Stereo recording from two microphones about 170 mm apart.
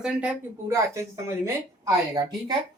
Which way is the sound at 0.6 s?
15° right (ahead or behind).